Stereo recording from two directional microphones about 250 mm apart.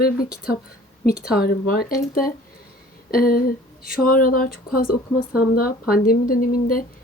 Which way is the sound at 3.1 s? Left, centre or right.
Left.